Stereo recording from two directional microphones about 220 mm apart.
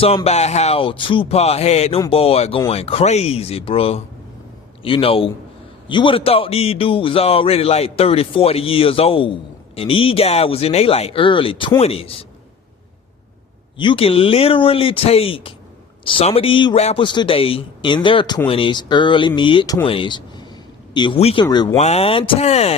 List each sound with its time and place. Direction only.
0.0 s speech: 25° left (ahead or behind)
13.7 s speech: 25° left (ahead or behind)
21.8 s speech: 30° left (ahead or behind)